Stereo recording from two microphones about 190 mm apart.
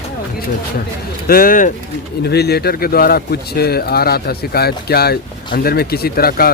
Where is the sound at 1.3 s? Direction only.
50° left (ahead or behind).